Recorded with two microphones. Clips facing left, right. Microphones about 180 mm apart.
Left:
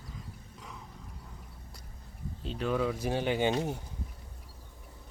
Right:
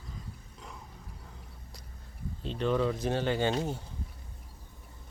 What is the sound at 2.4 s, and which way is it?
Speech, 5° left (ahead or behind).